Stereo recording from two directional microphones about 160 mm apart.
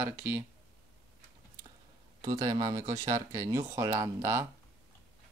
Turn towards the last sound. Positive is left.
turn(degrees=-15)  # may be behind; listen again after turning